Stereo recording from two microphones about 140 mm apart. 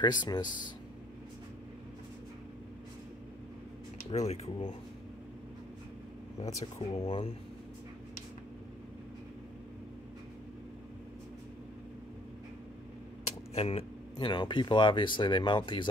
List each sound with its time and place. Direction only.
0.0 s speech: 30° left (ahead or behind)
4.1 s speech: 50° left (ahead or behind)
6.9 s speech: 35° left (ahead or behind)
13.6 s speech: 45° left (ahead or behind)
14.1 s speech: 35° left (ahead or behind)